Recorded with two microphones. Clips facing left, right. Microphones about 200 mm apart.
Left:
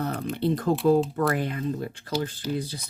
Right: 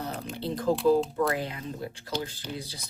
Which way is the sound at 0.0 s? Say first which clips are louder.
Left 7 dB; 55° left (ahead or behind).